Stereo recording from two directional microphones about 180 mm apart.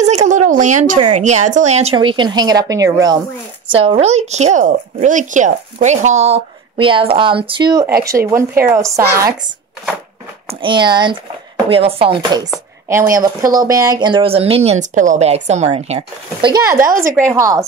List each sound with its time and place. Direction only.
0.0 s a sound: 40° right (ahead or behind)
1.2 s speech: 40° right (ahead or behind); by 3.2 s 20° right (ahead or behind)
3.7 s a woman's voice: 30° right (ahead or behind)
7.8 s speech: 15° right (ahead or behind)
10.6 s speech: 25° right (ahead or behind)
12.8 s speech: 15° right (ahead or behind)